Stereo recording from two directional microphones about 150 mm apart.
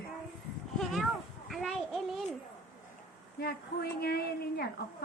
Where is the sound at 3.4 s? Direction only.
90° left.